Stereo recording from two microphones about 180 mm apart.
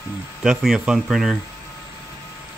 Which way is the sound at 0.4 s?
Centre (ahead or behind).